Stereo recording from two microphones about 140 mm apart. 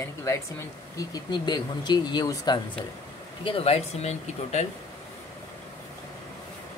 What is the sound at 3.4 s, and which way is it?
Speech, 45° left (ahead or behind).